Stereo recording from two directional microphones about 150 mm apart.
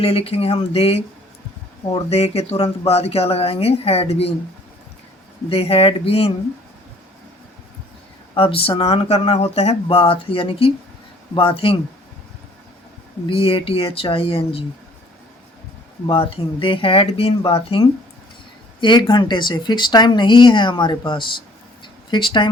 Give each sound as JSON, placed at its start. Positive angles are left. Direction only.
{"t": 0.0, "sound": "speech", "side_deg": 40}
{"t": 5.5, "sound": "speech", "side_deg": 40}
{"t": 8.4, "sound": "speech", "side_deg": 35}
{"t": 13.2, "sound": "speech", "side_deg": 40}
{"t": 16.0, "sound": "speech", "side_deg": 40}